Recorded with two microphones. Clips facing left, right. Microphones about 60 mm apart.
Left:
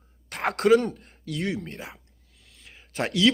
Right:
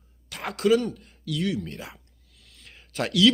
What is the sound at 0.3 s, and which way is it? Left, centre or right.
Speech, left.